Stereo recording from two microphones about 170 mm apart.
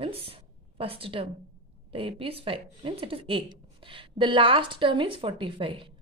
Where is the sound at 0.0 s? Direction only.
35° right (ahead or behind).